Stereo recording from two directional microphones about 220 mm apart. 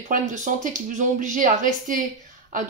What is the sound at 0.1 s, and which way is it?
A woman's voice, 35° right (ahead or behind).